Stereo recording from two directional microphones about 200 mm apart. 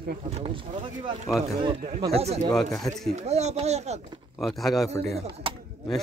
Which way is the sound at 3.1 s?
35° right (ahead or behind).